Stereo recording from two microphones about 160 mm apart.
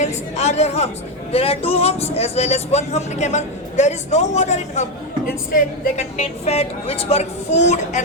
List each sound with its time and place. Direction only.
0.0 s a woman's voice: 45° left (ahead or behind)